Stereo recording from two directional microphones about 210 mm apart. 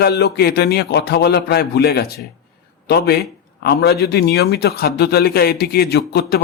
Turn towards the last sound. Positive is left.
turn(degrees=50)  # may be behind; listen again after turning